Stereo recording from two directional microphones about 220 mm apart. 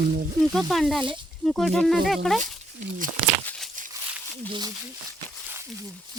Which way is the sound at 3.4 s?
5° left (ahead or behind).